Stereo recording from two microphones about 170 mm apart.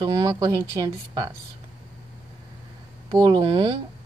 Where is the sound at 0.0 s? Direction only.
25° right (ahead or behind).